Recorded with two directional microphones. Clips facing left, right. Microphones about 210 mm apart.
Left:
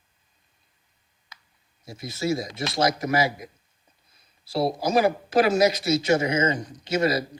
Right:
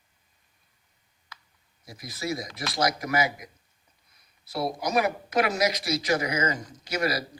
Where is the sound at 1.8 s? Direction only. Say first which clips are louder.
Left 6 dB; 25° left (ahead or behind).